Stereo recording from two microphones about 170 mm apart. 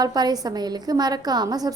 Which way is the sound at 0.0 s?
25° right (ahead or behind).